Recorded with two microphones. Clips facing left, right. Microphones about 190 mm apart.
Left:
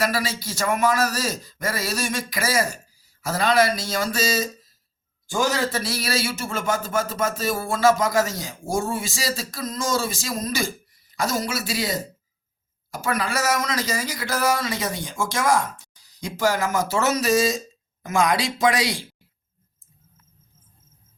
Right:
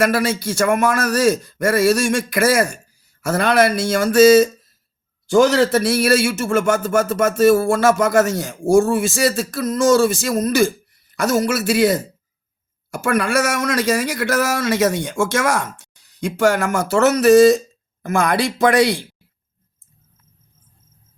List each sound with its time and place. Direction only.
0.0 s a man's voice: 55° right (ahead or behind)
5.3 s a man's voice: 70° right (ahead or behind)